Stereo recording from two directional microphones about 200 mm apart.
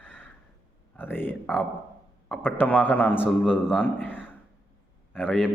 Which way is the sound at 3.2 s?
5° right (ahead or behind).